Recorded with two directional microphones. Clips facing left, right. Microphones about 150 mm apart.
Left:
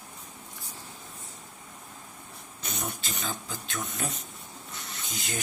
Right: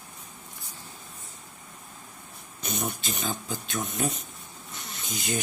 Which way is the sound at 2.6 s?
20° right (ahead or behind).